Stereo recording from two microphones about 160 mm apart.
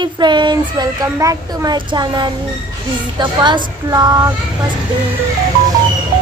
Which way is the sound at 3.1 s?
30° right (ahead or behind).